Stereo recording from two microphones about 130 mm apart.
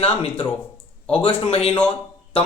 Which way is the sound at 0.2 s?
45° left (ahead or behind).